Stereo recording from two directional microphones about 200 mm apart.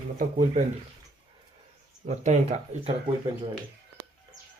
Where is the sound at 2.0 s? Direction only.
35° right (ahead or behind).